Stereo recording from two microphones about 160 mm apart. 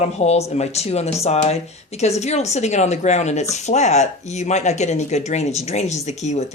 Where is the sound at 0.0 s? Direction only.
40° left (ahead or behind).